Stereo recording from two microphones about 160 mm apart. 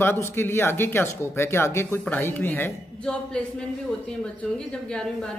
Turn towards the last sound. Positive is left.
turn(degrees=5)  # may be behind; listen again after turning